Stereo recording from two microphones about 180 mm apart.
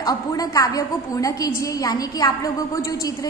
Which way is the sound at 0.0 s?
20° left (ahead or behind).